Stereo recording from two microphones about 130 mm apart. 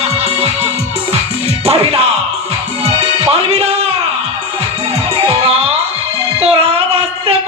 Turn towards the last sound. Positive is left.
turn(degrees=-50)  # may be behind; listen again after turning